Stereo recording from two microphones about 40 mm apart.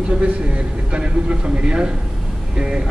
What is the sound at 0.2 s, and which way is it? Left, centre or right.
A man's voice, right.